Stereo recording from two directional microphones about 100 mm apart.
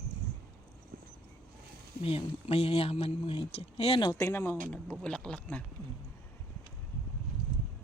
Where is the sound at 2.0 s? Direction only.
75° left (ahead or behind).